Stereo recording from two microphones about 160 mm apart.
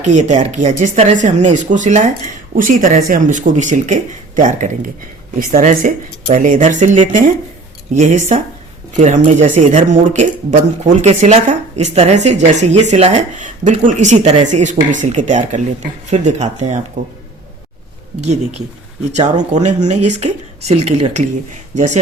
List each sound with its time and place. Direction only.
0.0 s speech: 50° right (ahead or behind)
18.2 s speech: 45° right (ahead or behind)